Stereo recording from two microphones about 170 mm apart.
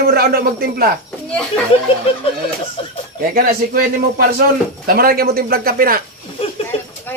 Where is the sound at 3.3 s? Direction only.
60° right (ahead or behind).